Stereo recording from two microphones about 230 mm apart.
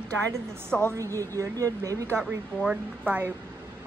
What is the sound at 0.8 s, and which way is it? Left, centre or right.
A woman's voice, centre.